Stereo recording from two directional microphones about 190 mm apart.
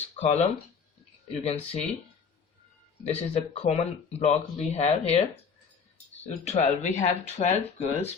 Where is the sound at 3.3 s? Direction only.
30° left (ahead or behind).